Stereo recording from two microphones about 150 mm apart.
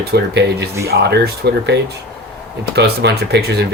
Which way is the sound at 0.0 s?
90° right.